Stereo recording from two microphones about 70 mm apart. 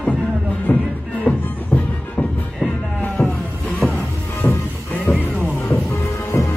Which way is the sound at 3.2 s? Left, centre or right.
Centre.